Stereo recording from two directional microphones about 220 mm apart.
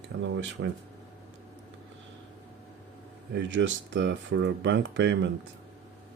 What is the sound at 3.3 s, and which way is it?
Speech, 55° right (ahead or behind).